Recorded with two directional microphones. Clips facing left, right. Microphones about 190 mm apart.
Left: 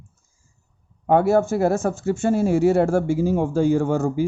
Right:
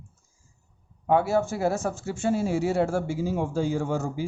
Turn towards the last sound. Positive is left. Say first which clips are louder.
# left 7 dB
turn(degrees=55)  # may be behind; listen again after turning